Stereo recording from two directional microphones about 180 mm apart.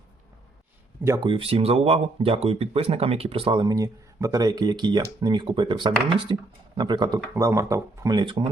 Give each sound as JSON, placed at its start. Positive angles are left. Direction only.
{"t": 1.0, "sound": "speech", "side_deg": -15}
{"t": 1.3, "sound": "speech", "side_deg": -30}